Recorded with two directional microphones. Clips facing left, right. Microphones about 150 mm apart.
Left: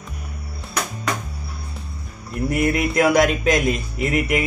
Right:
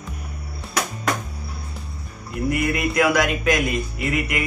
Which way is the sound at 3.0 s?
30° left (ahead or behind).